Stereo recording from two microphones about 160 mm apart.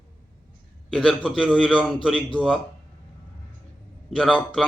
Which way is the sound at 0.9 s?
5° left (ahead or behind).